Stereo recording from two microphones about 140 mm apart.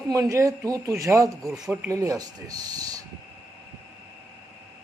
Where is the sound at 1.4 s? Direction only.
Centre (ahead or behind).